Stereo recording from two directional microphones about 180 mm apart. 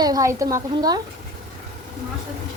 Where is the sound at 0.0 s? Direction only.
20° right (ahead or behind).